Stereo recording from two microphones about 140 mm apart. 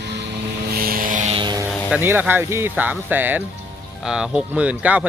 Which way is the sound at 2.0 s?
15° right (ahead or behind).